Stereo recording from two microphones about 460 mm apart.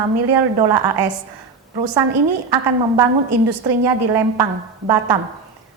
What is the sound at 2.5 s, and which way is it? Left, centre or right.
A woman's voice, right.